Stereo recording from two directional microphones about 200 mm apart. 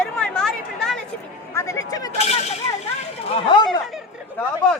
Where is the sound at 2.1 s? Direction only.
35° left (ahead or behind).